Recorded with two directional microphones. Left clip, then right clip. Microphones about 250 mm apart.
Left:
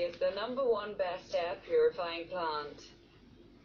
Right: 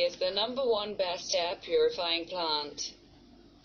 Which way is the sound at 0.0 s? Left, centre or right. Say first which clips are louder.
Right 4 dB; right.